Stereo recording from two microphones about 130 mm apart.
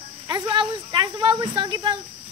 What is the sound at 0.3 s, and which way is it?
Speech, 35° right (ahead or behind).